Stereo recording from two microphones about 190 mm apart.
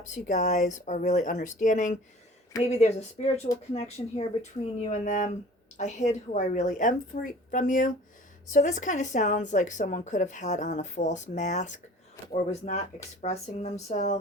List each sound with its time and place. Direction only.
0.0 s speech: 40° left (ahead or behind)